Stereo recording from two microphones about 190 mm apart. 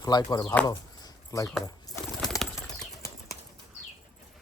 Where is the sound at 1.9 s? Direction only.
20° left (ahead or behind).